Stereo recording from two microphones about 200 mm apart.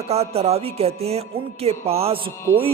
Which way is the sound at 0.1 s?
30° right (ahead or behind).